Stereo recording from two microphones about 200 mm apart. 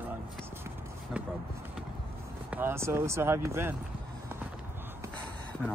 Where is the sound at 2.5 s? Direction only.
10° right (ahead or behind).